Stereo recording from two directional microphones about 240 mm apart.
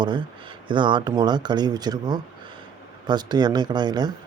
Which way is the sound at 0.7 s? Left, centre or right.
Centre.